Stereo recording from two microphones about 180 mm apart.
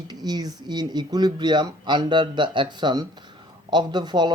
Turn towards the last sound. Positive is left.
turn(degrees=-25)  # may be behind; listen again after turning